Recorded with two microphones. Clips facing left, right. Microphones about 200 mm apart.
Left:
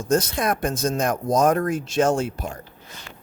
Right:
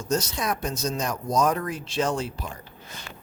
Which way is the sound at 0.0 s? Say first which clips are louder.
Left 5 dB; 50° left (ahead or behind).